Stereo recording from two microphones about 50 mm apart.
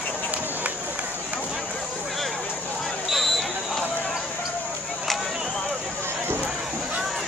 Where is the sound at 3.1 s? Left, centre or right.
Centre.